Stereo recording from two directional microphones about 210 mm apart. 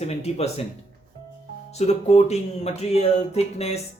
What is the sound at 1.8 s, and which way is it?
Speech, 30° left (ahead or behind).